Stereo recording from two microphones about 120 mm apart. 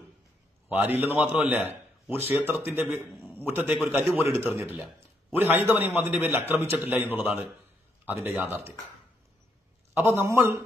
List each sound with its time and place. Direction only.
0.7 s a man's voice: 15° right (ahead or behind)
9.9 s a man's voice: 20° right (ahead or behind)